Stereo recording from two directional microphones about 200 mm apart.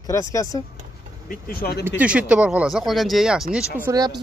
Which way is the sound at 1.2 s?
45° left (ahead or behind).